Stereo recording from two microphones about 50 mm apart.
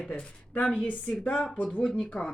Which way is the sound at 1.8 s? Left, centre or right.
Left.